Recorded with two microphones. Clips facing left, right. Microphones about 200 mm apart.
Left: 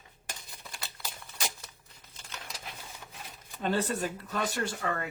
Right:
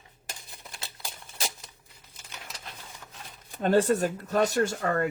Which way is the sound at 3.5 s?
50° right (ahead or behind).